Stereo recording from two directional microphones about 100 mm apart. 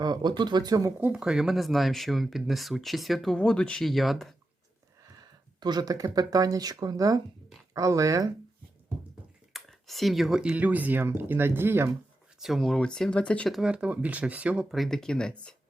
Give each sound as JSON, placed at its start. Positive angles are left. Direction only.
{"t": 0.0, "sound": "speech", "side_deg": -45}
{"t": 0.9, "sound": "speech", "side_deg": -15}
{"t": 5.5, "sound": "speech", "side_deg": -45}
{"t": 9.5, "sound": "speech", "side_deg": 0}
{"t": 12.4, "sound": "speech", "side_deg": 0}
{"t": 13.5, "sound": "speech", "side_deg": -5}